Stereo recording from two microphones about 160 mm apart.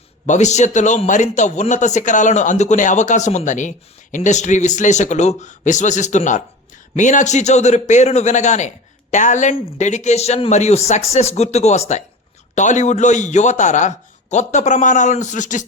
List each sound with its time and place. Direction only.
0.3 s a man's voice: 45° left (ahead or behind)